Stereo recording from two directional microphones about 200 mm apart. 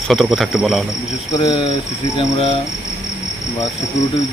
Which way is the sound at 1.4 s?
20° left (ahead or behind).